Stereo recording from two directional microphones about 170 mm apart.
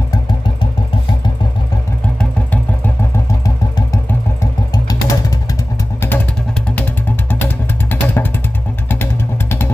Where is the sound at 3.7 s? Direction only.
20° left (ahead or behind).